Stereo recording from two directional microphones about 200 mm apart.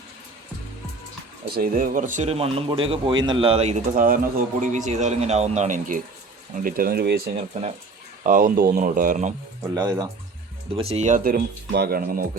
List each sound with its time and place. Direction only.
1.5 s speech: 50° right (ahead or behind)
8.2 s speech: 40° right (ahead or behind)
9.7 s speech: 20° right (ahead or behind)
10.8 s speech: 30° right (ahead or behind)